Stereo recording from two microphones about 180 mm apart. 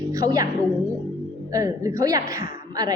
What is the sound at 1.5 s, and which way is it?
Speech, 20° right (ahead or behind).